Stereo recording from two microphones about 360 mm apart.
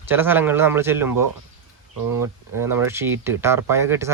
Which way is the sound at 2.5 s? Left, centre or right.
Centre.